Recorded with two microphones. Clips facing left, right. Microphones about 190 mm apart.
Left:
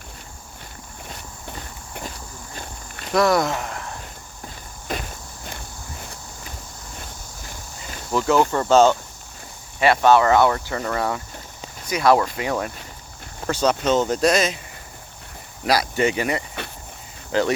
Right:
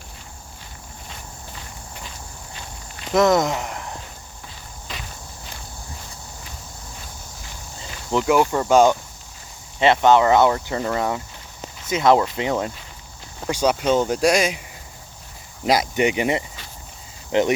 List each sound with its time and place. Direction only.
1.5 s walk: 55° left (ahead or behind)
3.1 s speech: 20° right (ahead or behind)
4.9 s walk: 50° left (ahead or behind)
8.3 s speech: 10° right (ahead or behind)
13.5 s speech: 10° right (ahead or behind)
15.6 s speech: 20° right (ahead or behind)